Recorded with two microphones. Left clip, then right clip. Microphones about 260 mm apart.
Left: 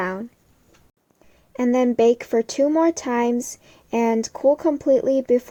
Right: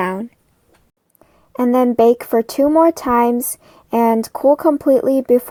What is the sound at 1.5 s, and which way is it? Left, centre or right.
Speech, centre.